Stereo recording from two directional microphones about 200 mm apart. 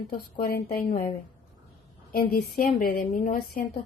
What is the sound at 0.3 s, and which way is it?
Speech, 50° left (ahead or behind).